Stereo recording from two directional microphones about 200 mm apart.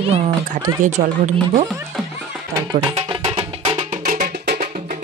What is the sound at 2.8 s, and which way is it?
Music, 25° right (ahead or behind).